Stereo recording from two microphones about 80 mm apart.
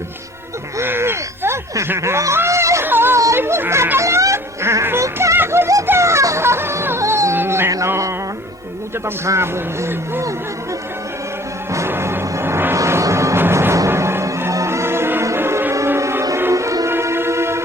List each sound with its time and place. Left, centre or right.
0.8 s a sound: right
2.8 s yodeling: right
3.3 s speech: right
4.0 s a sound: right
7.9 s music: right
9.0 s speech: right
11.7 s music: right